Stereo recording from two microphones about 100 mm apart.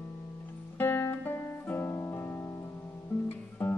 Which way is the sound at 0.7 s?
25° left (ahead or behind).